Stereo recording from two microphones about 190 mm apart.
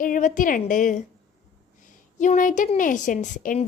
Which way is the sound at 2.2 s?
40° left (ahead or behind).